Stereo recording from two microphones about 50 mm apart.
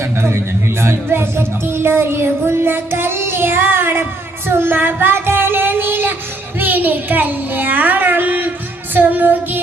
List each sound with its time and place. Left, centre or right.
0.0 s a man's voice: right
4.4 s child singing: right